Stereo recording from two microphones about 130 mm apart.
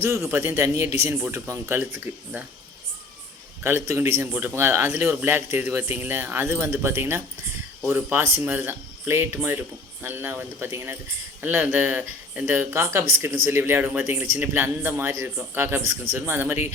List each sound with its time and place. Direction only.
0.0 s speech: 20° right (ahead or behind)
3.6 s speech: 20° right (ahead or behind)